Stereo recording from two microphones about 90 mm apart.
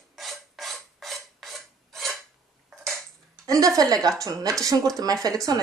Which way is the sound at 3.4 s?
40° right (ahead or behind).